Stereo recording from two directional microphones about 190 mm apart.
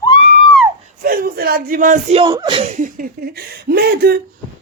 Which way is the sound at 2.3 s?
25° right (ahead or behind).